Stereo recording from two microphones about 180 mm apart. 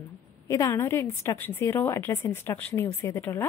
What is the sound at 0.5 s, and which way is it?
A woman's voice, 15° left (ahead or behind).